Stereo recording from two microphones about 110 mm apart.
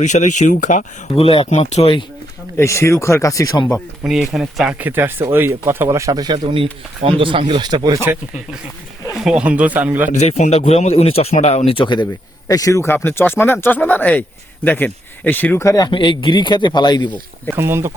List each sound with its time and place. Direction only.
0.0 s speech: 90° left
2.6 s speech: 25° left (ahead or behind)
4.0 s speech: 5° right (ahead or behind)
4.7 s speech: 15° right (ahead or behind); by 7.9 s 40° right (ahead or behind)
7.9 s speech: 20° right (ahead or behind)
9.2 s speech: 10° right (ahead or behind)
10.2 s speech: 85° left
11.7 s a man's voice: 45° left (ahead or behind)
12.5 s speech: 30° left (ahead or behind); by 15.6 s 15° left (ahead or behind)
15.6 s speech: 35° left (ahead or behind)
15.9 s a man's voice: 50° left (ahead or behind)
17.6 s speech: 25° right (ahead or behind)